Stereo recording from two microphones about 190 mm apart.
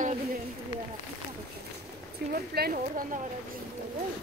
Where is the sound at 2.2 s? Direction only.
55° right (ahead or behind).